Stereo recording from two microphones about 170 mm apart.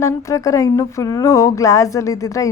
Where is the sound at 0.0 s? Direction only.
20° left (ahead or behind).